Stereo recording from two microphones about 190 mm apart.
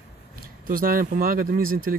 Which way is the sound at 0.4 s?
50° right (ahead or behind).